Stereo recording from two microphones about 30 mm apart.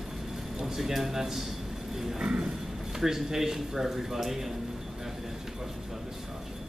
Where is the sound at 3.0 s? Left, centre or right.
Centre.